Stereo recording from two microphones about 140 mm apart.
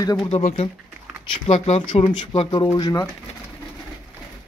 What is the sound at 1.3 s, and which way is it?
Speech, 40° left (ahead or behind).